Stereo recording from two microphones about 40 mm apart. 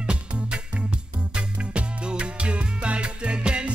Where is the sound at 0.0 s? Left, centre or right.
Right.